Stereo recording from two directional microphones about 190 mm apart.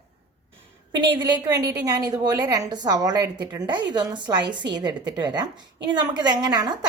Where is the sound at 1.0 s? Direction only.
25° right (ahead or behind).